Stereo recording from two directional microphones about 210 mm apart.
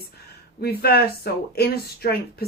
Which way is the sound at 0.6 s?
50° left (ahead or behind).